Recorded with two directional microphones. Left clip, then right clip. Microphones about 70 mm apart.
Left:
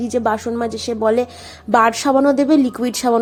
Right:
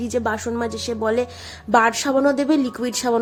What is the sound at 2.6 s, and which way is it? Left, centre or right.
Speech, left.